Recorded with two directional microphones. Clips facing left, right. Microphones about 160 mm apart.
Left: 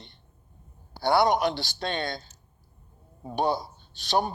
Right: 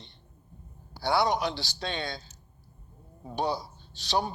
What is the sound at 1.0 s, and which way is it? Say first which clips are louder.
Speech: left 4 dB; 50° left (ahead or behind).